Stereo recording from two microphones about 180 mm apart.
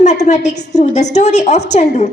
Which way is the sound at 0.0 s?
40° left (ahead or behind).